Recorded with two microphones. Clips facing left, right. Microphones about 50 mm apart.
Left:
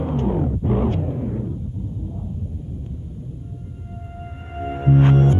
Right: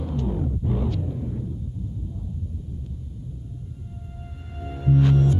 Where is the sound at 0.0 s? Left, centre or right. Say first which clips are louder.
Left 6 dB; left.